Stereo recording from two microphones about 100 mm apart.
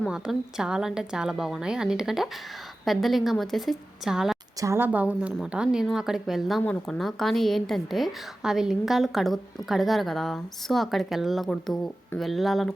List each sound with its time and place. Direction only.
0.1 s a woman's voice: 5° right (ahead or behind)
4.6 s a woman's voice: 25° right (ahead or behind)
4.9 s a woman's voice: 15° right (ahead or behind)